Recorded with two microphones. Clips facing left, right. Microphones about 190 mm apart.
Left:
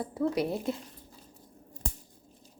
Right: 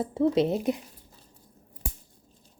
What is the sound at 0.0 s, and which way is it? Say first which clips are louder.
Speech: right 6 dB; 25° right (ahead or behind).